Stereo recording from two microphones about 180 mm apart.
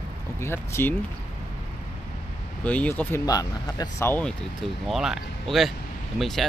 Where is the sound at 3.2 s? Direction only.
20° left (ahead or behind).